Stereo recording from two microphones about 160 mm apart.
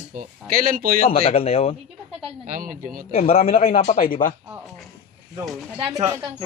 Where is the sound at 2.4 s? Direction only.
55° right (ahead or behind).